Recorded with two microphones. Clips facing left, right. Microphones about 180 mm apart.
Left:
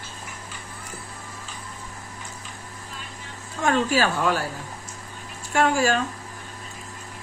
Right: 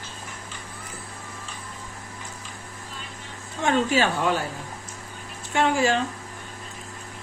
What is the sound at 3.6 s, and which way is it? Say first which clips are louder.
Speech: even; 25° right (ahead or behind).